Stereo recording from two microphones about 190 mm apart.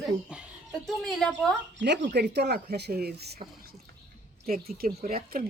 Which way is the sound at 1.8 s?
60° right (ahead or behind).